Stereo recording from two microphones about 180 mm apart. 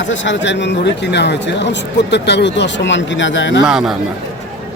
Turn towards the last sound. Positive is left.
turn(degrees=0)  # may be behind; listen again after turning